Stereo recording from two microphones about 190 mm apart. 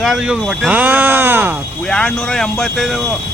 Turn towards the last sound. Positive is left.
turn(degrees=0)  # may be behind; listen again after turning